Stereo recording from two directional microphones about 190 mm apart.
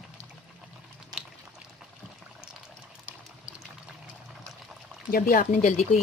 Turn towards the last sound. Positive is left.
turn(degrees=40)  # may be behind; listen again after turning